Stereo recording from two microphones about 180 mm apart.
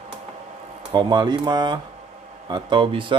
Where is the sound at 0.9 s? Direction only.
25° right (ahead or behind).